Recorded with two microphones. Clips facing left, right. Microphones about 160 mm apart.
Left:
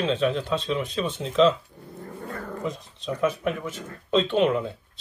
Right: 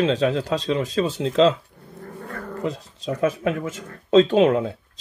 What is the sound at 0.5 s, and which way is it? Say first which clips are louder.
Speech: right 4 dB; 90° right.